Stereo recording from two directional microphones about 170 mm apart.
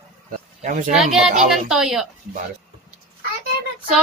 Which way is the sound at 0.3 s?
50° right (ahead or behind).